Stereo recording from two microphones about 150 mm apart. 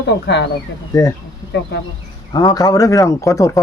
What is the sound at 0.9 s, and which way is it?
Speech, 25° left (ahead or behind).